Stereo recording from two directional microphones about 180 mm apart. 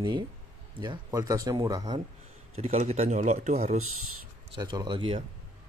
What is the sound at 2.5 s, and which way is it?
Speech, 40° right (ahead or behind).